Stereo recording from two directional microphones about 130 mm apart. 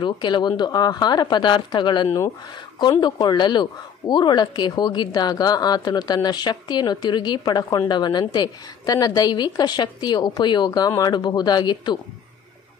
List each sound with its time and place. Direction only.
0.0 s speech: 35° left (ahead or behind)